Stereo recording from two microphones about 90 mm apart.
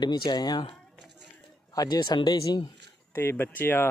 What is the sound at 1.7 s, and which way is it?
Speech, 45° left (ahead or behind).